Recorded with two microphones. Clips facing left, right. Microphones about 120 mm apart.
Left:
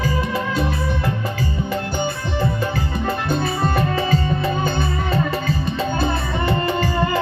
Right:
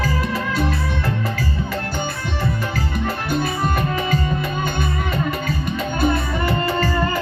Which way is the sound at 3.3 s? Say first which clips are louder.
Even; 30° left (ahead or behind).